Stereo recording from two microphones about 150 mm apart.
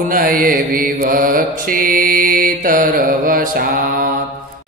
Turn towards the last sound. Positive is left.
turn(degrees=-75)  # may be behind; listen again after turning